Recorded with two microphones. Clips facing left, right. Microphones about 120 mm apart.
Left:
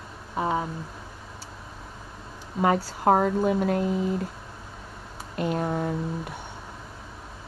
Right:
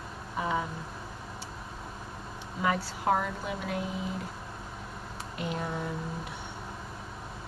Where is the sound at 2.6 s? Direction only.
45° left (ahead or behind).